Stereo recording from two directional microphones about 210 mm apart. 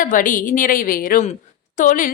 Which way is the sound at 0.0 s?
40° left (ahead or behind).